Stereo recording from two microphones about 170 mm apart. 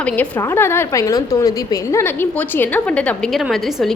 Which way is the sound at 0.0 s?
10° left (ahead or behind).